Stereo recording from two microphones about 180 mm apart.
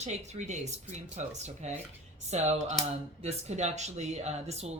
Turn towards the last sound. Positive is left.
turn(degrees=-35)  # may be behind; listen again after turning